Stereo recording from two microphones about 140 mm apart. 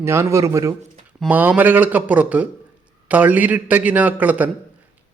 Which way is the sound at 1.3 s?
15° right (ahead or behind).